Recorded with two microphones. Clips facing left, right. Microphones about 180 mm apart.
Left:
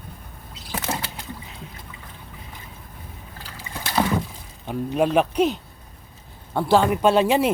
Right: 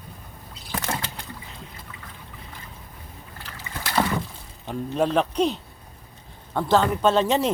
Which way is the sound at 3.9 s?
10° left (ahead or behind).